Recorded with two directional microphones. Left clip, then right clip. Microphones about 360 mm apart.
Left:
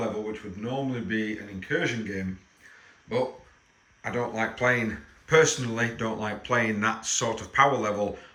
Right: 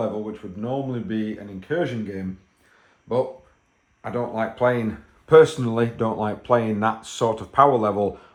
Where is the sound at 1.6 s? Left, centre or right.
Right.